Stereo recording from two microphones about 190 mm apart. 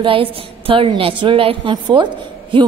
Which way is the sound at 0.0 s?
30° right (ahead or behind).